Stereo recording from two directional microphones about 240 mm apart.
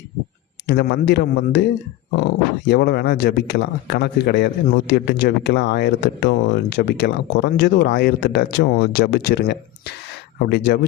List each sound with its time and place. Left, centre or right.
0.7 s speech: left